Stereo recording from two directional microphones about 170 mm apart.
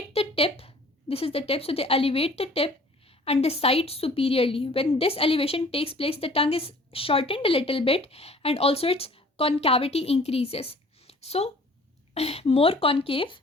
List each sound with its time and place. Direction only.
0.1 s speech: 35° left (ahead or behind)